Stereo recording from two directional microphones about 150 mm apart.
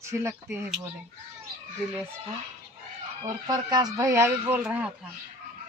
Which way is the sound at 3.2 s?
25° right (ahead or behind).